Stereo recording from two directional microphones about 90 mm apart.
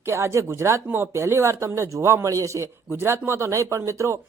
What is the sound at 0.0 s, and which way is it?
A man's voice, 30° right (ahead or behind).